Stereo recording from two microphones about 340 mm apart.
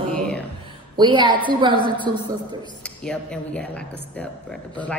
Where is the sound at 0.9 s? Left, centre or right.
Centre.